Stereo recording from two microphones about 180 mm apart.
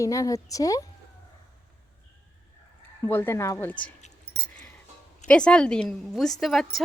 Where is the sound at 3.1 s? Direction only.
10° left (ahead or behind).